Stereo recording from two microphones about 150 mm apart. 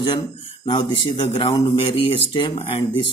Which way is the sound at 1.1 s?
45° left (ahead or behind).